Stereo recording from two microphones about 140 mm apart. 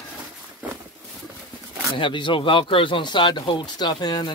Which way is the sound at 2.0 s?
35° left (ahead or behind).